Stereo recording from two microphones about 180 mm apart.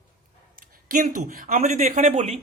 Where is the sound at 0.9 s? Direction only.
50° right (ahead or behind).